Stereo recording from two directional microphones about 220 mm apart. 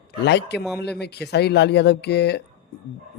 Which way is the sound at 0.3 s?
50° left (ahead or behind).